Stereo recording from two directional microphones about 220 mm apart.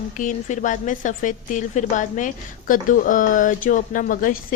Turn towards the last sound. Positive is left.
turn(degrees=40)  # may be behind; listen again after turning